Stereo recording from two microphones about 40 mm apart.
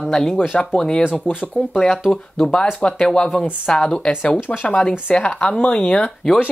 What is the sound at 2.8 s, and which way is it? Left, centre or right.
Speech, centre.